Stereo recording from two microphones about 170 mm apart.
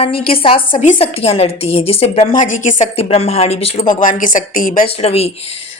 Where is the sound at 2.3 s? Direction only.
50° left (ahead or behind).